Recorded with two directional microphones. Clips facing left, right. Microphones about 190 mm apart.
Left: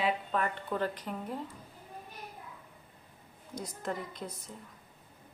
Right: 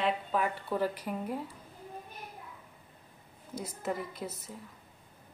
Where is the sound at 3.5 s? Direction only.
5° right (ahead or behind).